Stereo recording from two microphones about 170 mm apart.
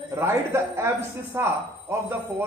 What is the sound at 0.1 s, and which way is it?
Speech, 15° right (ahead or behind).